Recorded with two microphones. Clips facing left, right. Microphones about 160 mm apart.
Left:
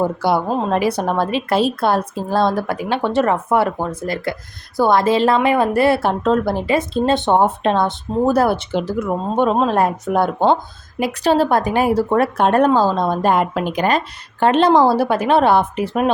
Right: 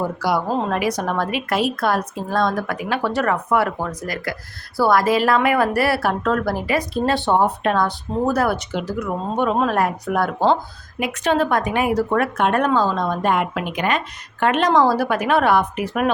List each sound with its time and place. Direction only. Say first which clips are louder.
0.0 s a woman's voice: left 4 dB; 25° left (ahead or behind)